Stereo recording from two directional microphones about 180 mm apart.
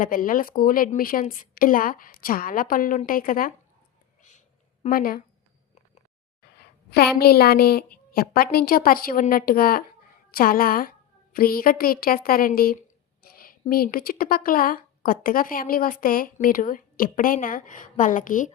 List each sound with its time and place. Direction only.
0.0 s speech: 50° left (ahead or behind)
4.2 s a sound: 40° left (ahead or behind)
6.9 s a woman's voice: 60° left (ahead or behind)